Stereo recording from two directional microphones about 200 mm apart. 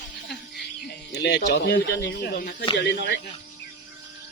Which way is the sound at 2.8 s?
55° left (ahead or behind).